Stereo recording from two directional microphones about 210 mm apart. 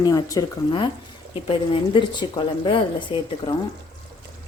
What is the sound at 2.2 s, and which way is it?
Speech, 20° left (ahead or behind).